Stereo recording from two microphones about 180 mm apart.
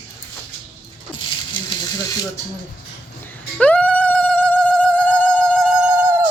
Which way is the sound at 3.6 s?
5° left (ahead or behind).